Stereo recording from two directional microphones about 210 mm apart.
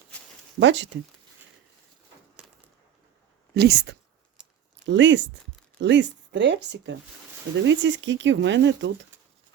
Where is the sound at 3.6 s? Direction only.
50° right (ahead or behind).